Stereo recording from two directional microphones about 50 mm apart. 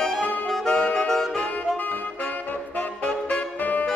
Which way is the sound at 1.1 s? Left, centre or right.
Centre.